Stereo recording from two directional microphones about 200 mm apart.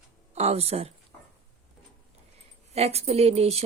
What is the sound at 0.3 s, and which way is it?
Speech, 30° right (ahead or behind).